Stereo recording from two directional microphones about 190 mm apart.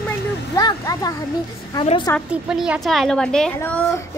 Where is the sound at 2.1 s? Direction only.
5° right (ahead or behind).